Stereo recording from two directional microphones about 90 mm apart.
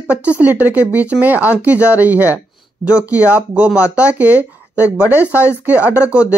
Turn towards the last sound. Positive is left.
turn(degrees=-15)  # may be behind; listen again after turning